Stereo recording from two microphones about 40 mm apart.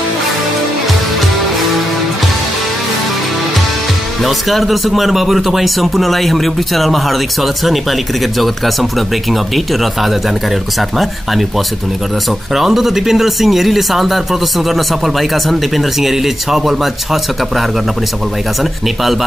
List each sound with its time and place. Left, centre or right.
4.2 s speech: centre